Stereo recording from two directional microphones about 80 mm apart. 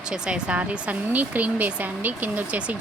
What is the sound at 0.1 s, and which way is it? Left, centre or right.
A woman's voice, centre.